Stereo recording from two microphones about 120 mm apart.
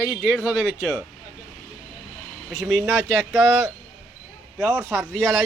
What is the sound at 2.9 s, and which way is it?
Speech, 20° right (ahead or behind).